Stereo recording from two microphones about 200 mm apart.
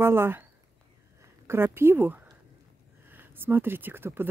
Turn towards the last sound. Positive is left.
turn(degrees=-10)  # may be behind; listen again after turning